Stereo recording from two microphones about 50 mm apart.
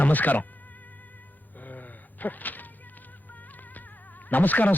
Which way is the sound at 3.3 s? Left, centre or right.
Left.